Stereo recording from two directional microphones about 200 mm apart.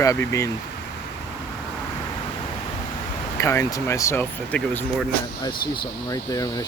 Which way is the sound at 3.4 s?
15° left (ahead or behind).